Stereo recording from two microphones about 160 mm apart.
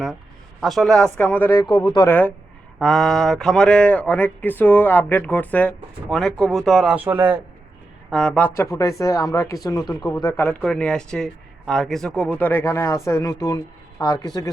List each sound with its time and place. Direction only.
0.6 s speech: centre (ahead or behind); by 2.0 s 30° left (ahead or behind)
2.0 s speech: 10° left (ahead or behind)
6.9 s a man's voice: 10° right (ahead or behind)
8.1 s speech: 5° left (ahead or behind); by 14.5 s 25° left (ahead or behind)